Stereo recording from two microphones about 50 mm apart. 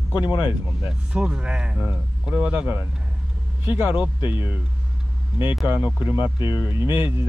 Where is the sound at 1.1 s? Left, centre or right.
Right.